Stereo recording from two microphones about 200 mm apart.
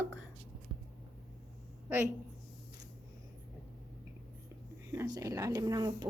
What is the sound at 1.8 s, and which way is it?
Speech, 10° right (ahead or behind).